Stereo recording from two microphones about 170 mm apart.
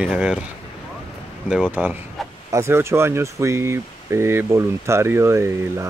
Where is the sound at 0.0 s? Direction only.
5° right (ahead or behind).